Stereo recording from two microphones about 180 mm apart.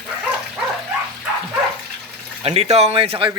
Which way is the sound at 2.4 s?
35° right (ahead or behind).